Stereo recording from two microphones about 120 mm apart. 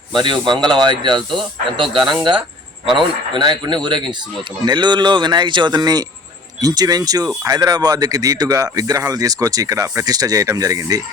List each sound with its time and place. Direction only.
0.1 s speech: 40° right (ahead or behind)